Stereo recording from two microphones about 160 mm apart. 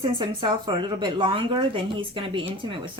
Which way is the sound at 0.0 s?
30° right (ahead or behind).